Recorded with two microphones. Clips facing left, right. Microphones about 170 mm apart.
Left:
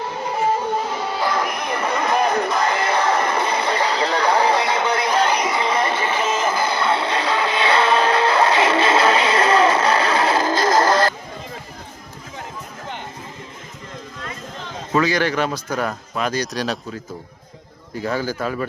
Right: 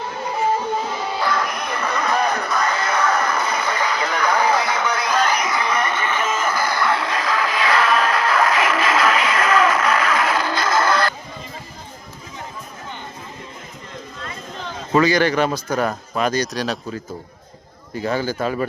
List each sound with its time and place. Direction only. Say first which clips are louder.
1.2 s music: left 1 dB; 20° left (ahead or behind)
10.4 s music: left 3 dB; 40° left (ahead or behind)
14.9 s speech: right 3 dB; centre (ahead or behind)
17.9 s speech: right 1 dB; centre (ahead or behind)